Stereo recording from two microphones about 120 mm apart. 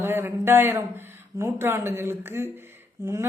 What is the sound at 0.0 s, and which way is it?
Speech, 20° right (ahead or behind).